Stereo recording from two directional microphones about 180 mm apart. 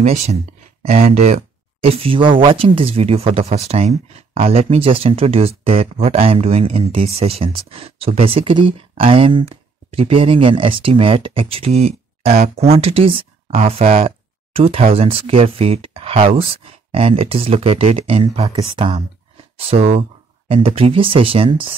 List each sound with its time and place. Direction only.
0.0 s speech: 35° right (ahead or behind)